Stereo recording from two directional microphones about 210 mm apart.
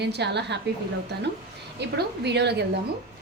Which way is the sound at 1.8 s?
55° right (ahead or behind).